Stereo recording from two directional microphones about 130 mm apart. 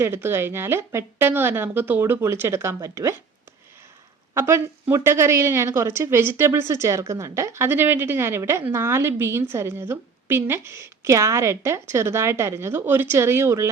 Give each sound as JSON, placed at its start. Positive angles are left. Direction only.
{"t": 0.0, "sound": "a woman's voice", "side_deg": -20}
{"t": 4.4, "sound": "a woman's voice", "side_deg": -20}